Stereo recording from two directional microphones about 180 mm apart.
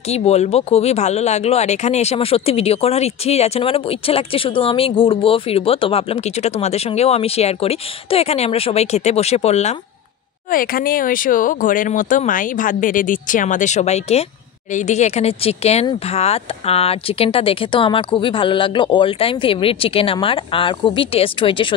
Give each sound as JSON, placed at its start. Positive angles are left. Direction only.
{"t": 0.1, "sound": "speech", "side_deg": 35}
{"t": 10.5, "sound": "speech", "side_deg": 55}